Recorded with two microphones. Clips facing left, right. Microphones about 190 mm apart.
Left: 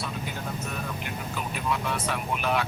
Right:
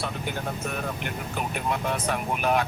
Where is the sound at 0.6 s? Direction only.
60° right (ahead or behind).